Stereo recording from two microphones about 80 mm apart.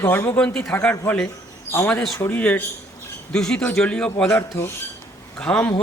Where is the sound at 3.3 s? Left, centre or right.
Centre.